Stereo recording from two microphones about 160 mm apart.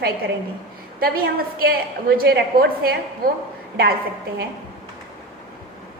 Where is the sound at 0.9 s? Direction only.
65° right (ahead or behind).